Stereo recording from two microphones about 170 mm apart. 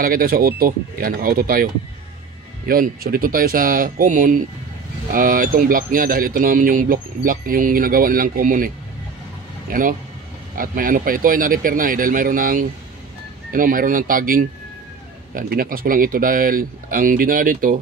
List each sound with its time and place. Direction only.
0.0 s speech: 55° right (ahead or behind)